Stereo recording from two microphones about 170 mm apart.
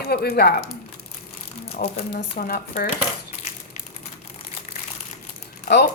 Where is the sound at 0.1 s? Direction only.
65° left (ahead or behind).